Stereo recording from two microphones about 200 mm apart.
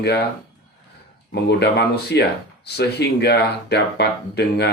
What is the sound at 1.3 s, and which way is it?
Speech, 55° left (ahead or behind).